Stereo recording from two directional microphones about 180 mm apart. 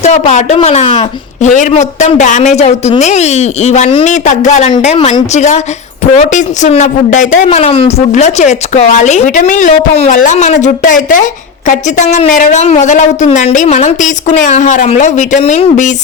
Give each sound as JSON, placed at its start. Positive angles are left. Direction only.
{"t": 0.0, "sound": "speech", "side_deg": 40}
{"t": 1.4, "sound": "speech", "side_deg": 40}